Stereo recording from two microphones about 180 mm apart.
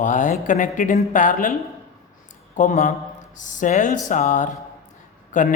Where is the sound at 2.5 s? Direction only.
45° left (ahead or behind).